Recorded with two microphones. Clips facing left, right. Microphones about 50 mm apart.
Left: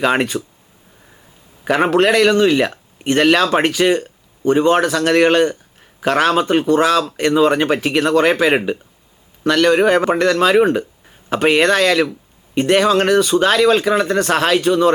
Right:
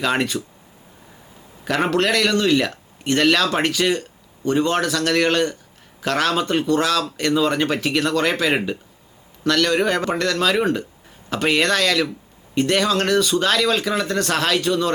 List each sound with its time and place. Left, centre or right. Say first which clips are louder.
0.0 s speech: left 5 dB; left
1.6 s speech: left 6 dB; centre